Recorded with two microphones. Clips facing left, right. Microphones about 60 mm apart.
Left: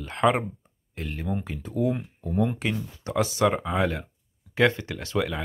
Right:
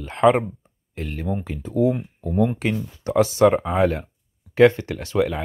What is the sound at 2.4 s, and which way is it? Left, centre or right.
Speech, right.